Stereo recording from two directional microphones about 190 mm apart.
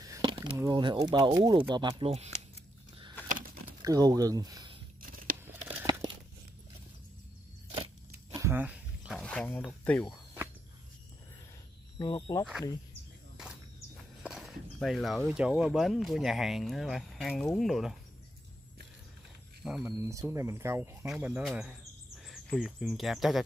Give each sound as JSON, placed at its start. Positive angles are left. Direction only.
{"t": 0.0, "sound": "speech", "side_deg": -20}
{"t": 1.7, "sound": "a sound", "side_deg": -25}
{"t": 3.8, "sound": "speech", "side_deg": -20}
{"t": 5.9, "sound": "tearing", "side_deg": -20}
{"t": 7.7, "sound": "crunch", "side_deg": -25}
{"t": 8.4, "sound": "a sound", "side_deg": -10}
{"t": 12.0, "sound": "speech", "side_deg": 20}
{"t": 14.2, "sound": "horse", "side_deg": 0}
{"t": 15.2, "sound": "speech", "side_deg": -5}
{"t": 19.6, "sound": "speech", "side_deg": -5}
{"t": 20.0, "sound": "speech", "side_deg": -15}